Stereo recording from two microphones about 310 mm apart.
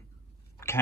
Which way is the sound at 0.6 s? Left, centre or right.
Centre.